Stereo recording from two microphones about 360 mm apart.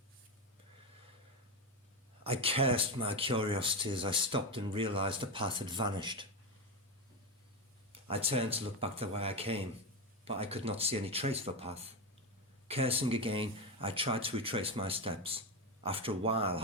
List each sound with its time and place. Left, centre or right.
2.2 s speech: centre
8.0 s speech: centre